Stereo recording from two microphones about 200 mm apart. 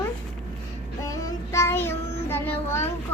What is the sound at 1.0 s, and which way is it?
Child singing, 15° left (ahead or behind).